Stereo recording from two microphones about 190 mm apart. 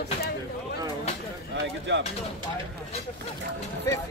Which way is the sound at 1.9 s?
70° right (ahead or behind).